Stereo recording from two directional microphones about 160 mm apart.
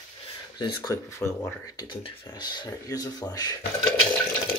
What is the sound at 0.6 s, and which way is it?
Speech, 20° left (ahead or behind).